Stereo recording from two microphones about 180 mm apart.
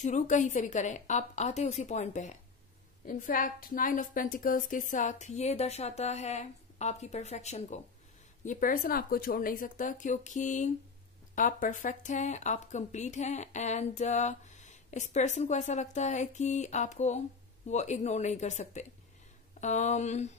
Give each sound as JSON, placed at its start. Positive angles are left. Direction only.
{"t": 0.0, "sound": "a woman's voice", "side_deg": 45}